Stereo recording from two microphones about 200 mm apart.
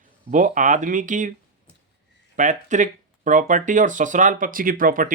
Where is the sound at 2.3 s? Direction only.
40° right (ahead or behind).